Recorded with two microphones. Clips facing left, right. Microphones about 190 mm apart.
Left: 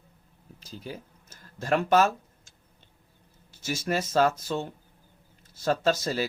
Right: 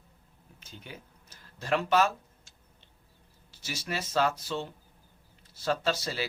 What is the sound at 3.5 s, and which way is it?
Speech, 45° left (ahead or behind).